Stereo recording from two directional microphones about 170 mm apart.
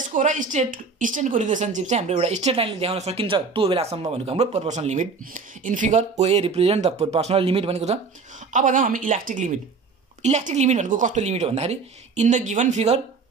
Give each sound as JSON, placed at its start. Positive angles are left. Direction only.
{"t": 0.1, "sound": "speech", "side_deg": -45}